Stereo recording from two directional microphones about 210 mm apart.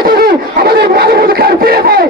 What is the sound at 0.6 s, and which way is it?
Battle cry, 50° right (ahead or behind).